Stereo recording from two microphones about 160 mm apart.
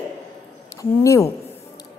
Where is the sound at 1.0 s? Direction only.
20° left (ahead or behind).